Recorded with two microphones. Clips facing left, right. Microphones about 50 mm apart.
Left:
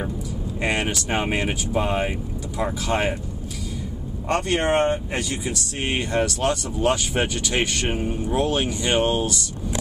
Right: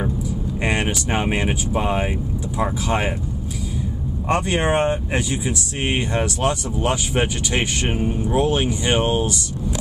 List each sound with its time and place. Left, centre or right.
0.6 s speech: centre
4.3 s speech: centre